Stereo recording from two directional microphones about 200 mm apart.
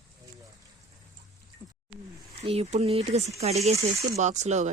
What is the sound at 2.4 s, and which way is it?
Speech, 30° right (ahead or behind).